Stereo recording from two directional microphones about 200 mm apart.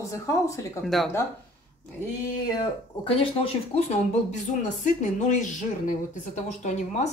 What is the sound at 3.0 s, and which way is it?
A woman's voice, 30° left (ahead or behind).